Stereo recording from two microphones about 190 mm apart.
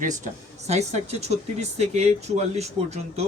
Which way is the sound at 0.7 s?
35° right (ahead or behind).